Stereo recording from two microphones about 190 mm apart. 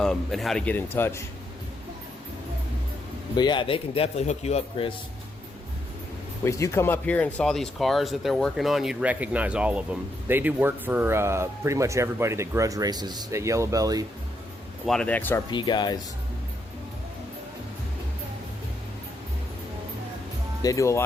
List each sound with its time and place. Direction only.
0.0 s speech: centre (ahead or behind)
3.3 s a man's voice: 25° left (ahead or behind)
6.4 s speech: 15° left (ahead or behind); by 14.0 s 20° right (ahead or behind)
14.8 s speech: 5° left (ahead or behind)
15.4 s a man's voice: 25° left (ahead or behind)
20.6 s speech: 15° left (ahead or behind)